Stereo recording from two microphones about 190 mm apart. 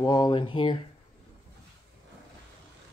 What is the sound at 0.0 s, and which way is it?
Speech, 20° left (ahead or behind).